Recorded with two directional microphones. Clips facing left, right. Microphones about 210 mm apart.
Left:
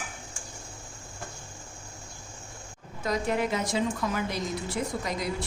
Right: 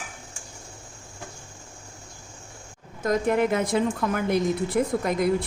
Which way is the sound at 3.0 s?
50° right (ahead or behind).